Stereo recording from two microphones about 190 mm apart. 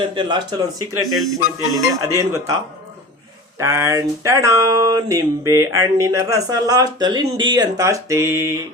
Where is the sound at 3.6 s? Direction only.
15° right (ahead or behind).